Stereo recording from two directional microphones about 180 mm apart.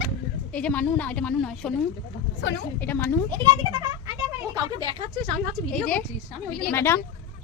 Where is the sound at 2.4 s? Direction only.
90° left.